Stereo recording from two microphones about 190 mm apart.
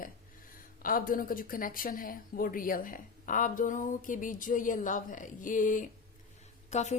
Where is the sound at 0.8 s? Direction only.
50° left (ahead or behind).